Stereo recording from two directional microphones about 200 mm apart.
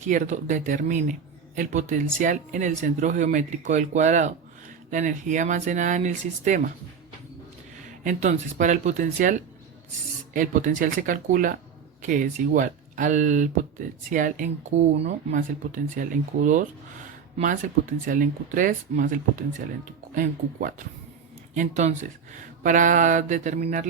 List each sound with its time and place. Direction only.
0.0 s speech: 40° right (ahead or behind)
8.0 s speech: 40° right (ahead or behind)
10.3 s speech: 40° right (ahead or behind)